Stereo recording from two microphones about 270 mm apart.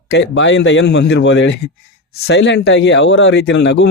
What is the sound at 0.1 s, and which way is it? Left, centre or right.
Speech, left.